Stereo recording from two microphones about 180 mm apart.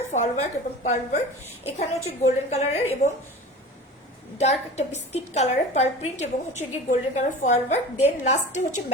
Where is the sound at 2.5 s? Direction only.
35° left (ahead or behind).